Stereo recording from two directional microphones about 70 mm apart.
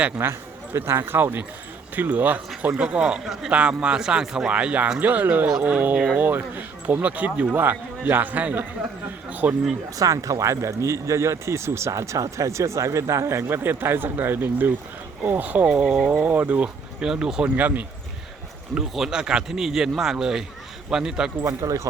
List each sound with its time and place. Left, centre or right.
0.2 s speech: right; by 4.5 s centre
4.5 s speech: right
10.0 s speech: right
15.7 s speech: centre
17.0 s speech: centre
17.6 s speech: right
18.7 s speech: centre
21.4 s speech: right